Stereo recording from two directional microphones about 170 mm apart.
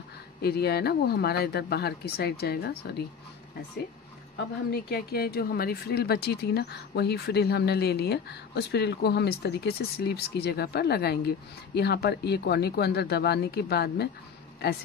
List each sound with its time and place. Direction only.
0.4 s speech: 70° left (ahead or behind)
4.6 s speech: 65° left (ahead or behind)